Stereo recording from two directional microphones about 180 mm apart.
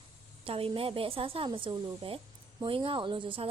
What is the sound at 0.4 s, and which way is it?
A woman's voice, 30° right (ahead or behind).